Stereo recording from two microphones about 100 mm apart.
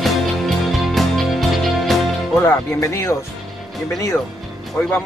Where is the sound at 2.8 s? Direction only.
30° left (ahead or behind).